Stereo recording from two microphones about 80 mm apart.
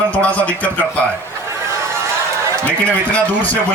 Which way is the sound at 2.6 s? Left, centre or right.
Centre.